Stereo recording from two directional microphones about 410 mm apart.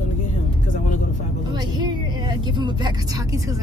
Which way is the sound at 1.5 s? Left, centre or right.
Centre.